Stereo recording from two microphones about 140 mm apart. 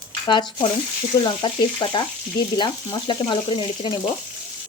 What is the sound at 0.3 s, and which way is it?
Speech, 35° left (ahead or behind).